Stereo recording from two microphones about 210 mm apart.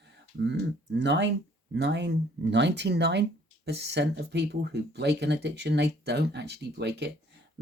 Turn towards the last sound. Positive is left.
turn(degrees=-55)  # may be behind; listen again after turning